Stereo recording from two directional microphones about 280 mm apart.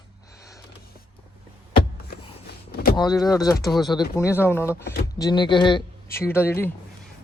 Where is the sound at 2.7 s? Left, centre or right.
Left.